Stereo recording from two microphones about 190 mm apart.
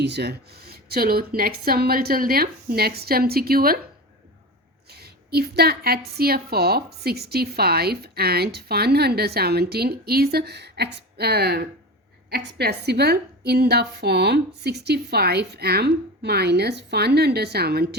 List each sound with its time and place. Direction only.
0.0 s speech: 60° right (ahead or behind)
4.9 s a woman's voice: 55° right (ahead or behind)